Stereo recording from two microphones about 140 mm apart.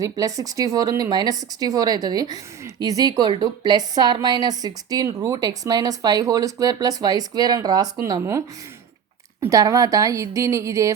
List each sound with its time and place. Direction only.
0.0 s speech: 25° right (ahead or behind)